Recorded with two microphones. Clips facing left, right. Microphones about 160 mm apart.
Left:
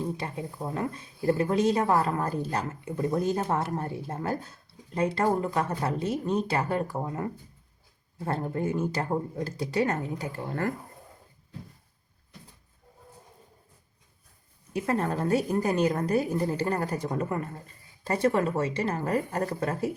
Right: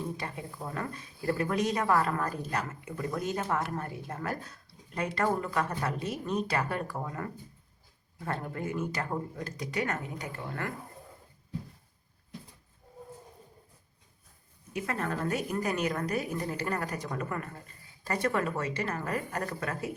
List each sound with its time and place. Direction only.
0.0 s a woman's voice: 25° left (ahead or behind)
14.7 s a woman's voice: 30° left (ahead or behind)